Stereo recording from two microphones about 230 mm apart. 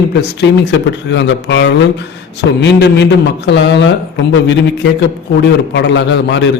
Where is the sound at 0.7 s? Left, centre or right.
Left.